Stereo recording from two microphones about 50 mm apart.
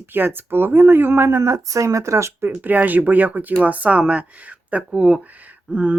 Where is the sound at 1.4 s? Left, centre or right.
Right.